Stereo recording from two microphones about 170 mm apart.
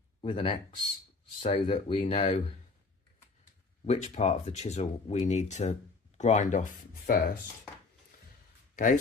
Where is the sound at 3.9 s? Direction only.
45° left (ahead or behind).